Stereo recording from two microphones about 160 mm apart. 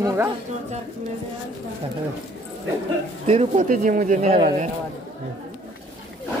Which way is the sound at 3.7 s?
55° right (ahead or behind).